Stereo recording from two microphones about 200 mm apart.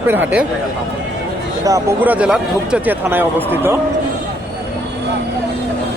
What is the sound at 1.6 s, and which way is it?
Speech, 15° right (ahead or behind).